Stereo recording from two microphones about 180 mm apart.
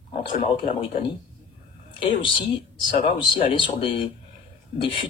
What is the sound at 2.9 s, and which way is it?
Speech, 25° left (ahead or behind).